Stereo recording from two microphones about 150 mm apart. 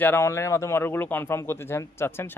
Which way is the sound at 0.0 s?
15° left (ahead or behind).